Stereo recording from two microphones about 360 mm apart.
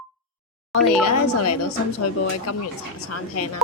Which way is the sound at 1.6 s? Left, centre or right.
Left.